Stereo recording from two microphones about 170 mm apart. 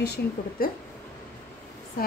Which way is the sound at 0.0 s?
70° left (ahead or behind).